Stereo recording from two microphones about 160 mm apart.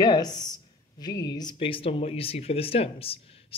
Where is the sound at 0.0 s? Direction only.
25° left (ahead or behind).